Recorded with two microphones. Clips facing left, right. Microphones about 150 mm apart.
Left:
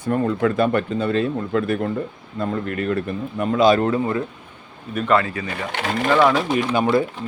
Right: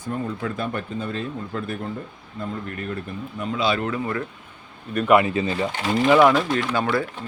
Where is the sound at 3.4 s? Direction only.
45° left (ahead or behind); by 4.2 s 25° left (ahead or behind).